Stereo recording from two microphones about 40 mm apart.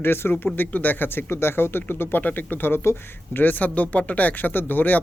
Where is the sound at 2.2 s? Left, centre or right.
Left.